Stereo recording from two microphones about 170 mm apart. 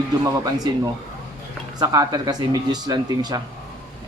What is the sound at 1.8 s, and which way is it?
Speech, 20° right (ahead or behind).